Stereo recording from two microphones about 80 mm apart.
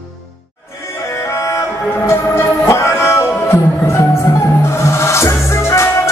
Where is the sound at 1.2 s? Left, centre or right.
Left.